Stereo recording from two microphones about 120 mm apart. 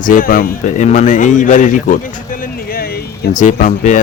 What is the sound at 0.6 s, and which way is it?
Speech, 90° left.